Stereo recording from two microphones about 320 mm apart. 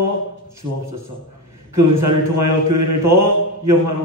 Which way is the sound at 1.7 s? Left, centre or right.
Right.